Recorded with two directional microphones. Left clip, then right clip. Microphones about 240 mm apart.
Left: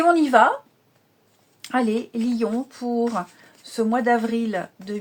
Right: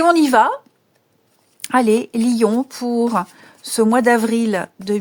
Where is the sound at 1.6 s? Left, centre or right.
Right.